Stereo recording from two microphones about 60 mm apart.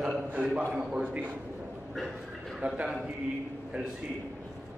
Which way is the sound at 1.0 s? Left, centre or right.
Right.